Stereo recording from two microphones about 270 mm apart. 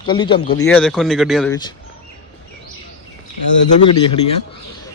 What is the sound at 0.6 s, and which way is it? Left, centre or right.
Speech, centre.